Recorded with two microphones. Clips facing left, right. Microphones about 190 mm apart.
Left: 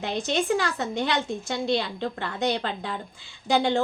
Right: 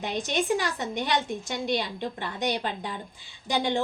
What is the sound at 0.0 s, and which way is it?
A woman's voice, 15° right (ahead or behind).